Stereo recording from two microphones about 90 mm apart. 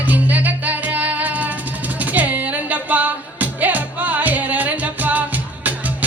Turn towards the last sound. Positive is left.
turn(degrees=-15)  # may be behind; listen again after turning